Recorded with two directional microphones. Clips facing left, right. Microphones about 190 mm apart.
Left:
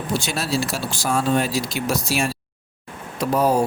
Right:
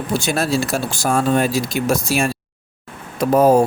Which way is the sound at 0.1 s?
50° right (ahead or behind).